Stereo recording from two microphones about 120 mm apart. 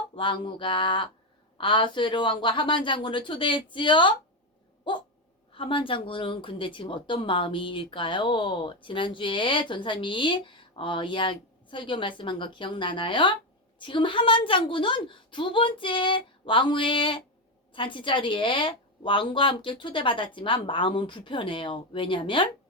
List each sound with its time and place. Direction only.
0.2 s speech: 45° left (ahead or behind)
5.5 s speech: 45° left (ahead or behind)